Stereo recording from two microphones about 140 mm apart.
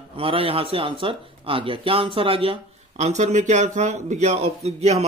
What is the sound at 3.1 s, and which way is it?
A man's voice, 60° right (ahead or behind).